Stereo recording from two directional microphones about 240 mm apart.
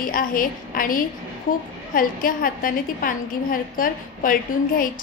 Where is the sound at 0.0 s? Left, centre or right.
Left.